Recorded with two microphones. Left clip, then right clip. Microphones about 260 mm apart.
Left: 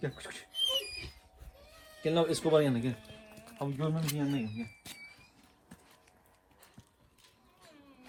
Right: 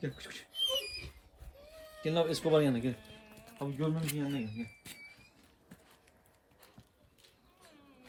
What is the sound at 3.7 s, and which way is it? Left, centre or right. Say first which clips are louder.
Speech: right 1 dB; centre.